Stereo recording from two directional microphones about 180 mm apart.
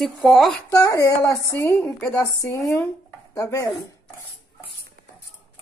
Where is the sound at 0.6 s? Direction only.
20° left (ahead or behind).